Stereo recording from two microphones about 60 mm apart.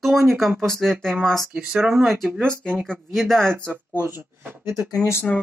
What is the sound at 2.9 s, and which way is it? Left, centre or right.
Speech, centre.